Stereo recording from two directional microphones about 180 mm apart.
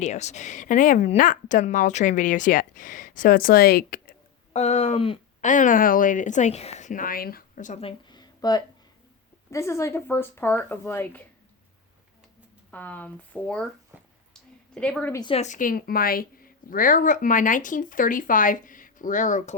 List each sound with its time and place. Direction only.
0.0 s a woman's voice: 40° left (ahead or behind); by 4.1 s 55° left (ahead or behind)
4.5 s speech: 40° left (ahead or behind)
5.5 s a woman's voice: 45° left (ahead or behind)
7.9 s a sound: 25° left (ahead or behind)
9.5 s speech: 15° left (ahead or behind)
12.7 s speech: 10° left (ahead or behind)
14.8 s a woman's voice: 5° left (ahead or behind)
15.1 s a woman's voice: 25° left (ahead or behind)
15.4 s a woman's voice: 45° left (ahead or behind)